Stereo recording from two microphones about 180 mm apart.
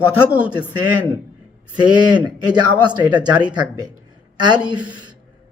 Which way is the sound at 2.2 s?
25° right (ahead or behind).